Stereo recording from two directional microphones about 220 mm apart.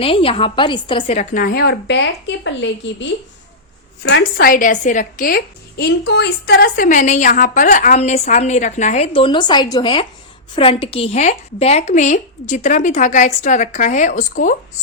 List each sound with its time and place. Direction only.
0.0 s a woman's voice: 25° left (ahead or behind); by 3.1 s 55° left (ahead or behind)
4.1 s a woman's voice: 40° left (ahead or behind)